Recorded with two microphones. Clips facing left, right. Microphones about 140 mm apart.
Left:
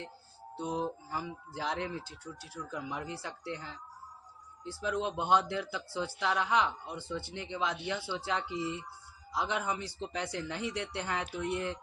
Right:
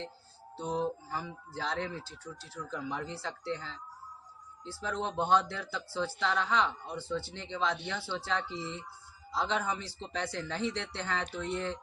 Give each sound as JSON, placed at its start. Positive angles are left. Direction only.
{"t": 0.5, "sound": "speech", "side_deg": 15}